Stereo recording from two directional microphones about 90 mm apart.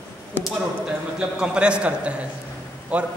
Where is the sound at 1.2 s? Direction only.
10° right (ahead or behind).